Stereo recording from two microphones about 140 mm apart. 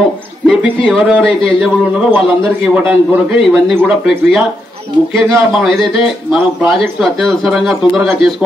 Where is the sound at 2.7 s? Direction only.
5° right (ahead or behind).